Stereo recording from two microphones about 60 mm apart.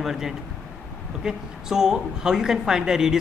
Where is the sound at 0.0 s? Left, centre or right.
Centre.